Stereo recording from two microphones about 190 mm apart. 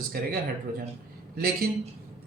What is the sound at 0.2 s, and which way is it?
Speech, 50° right (ahead or behind).